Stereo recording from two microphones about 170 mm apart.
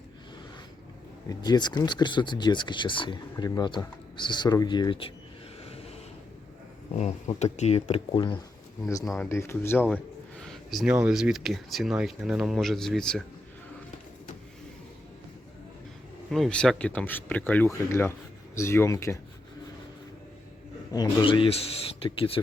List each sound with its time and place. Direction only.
1.3 s speech: 25° left (ahead or behind)
6.9 s speech: 40° left (ahead or behind)
9.0 s a man's voice: 5° left (ahead or behind)
16.3 s speech: 5° left (ahead or behind)
20.9 s speech: 25° left (ahead or behind)